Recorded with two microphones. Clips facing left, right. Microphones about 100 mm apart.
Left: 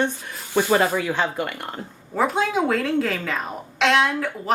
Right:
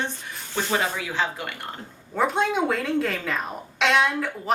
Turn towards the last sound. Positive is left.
turn(degrees=0)  # may be behind; listen again after turning